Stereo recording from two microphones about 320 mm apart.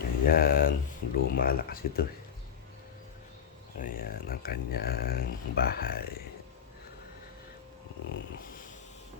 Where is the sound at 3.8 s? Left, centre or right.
Left.